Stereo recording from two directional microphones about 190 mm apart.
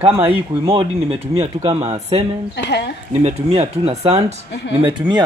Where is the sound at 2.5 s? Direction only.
60° left (ahead or behind).